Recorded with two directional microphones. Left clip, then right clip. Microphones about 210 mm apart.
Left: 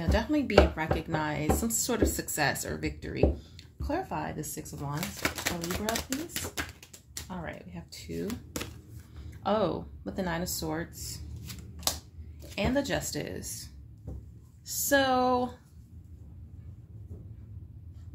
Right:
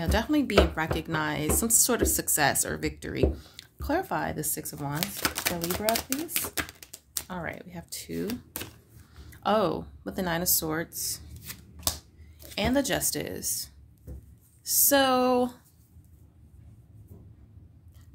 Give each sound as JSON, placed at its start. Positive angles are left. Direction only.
{"t": 0.0, "sound": "speech", "side_deg": -40}
{"t": 12.5, "sound": "speech", "side_deg": -40}